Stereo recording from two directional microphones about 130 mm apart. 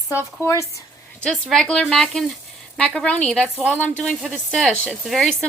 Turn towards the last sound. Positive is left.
turn(degrees=0)  # may be behind; listen again after turning